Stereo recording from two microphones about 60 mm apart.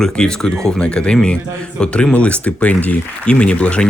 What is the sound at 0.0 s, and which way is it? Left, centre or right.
Speech, centre.